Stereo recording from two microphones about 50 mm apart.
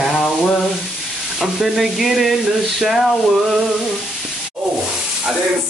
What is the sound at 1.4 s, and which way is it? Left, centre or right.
Sanding, centre.